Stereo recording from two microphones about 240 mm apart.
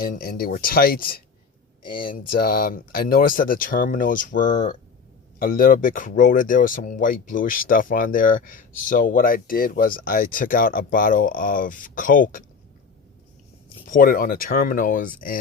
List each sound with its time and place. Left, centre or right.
0.0 s speech: left
13.9 s speech: left